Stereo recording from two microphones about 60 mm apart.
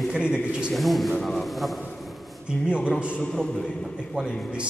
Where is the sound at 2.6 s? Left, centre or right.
Centre.